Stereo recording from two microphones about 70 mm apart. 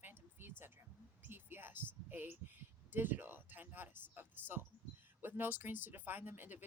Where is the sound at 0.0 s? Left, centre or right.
Right.